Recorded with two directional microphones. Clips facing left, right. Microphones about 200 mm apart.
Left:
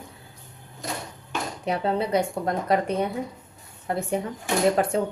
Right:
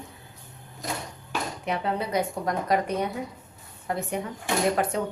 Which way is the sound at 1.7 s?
30° left (ahead or behind).